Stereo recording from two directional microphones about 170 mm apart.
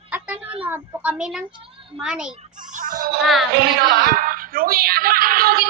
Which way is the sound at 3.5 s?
70° right (ahead or behind).